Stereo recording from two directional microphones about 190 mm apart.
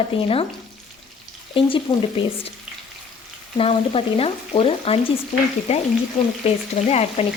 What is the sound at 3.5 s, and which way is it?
Speech, 30° left (ahead or behind).